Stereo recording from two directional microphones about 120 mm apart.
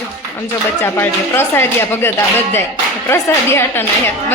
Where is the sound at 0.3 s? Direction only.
20° left (ahead or behind).